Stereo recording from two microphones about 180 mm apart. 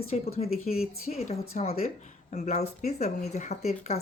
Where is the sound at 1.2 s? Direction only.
35° left (ahead or behind).